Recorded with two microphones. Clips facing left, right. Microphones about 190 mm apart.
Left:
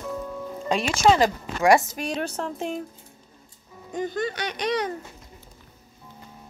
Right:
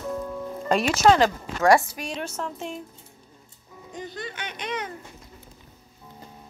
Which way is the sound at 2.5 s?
50° left (ahead or behind).